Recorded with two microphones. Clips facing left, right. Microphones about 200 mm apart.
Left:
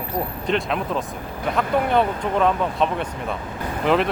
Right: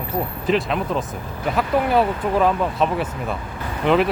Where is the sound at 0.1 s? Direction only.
5° right (ahead or behind).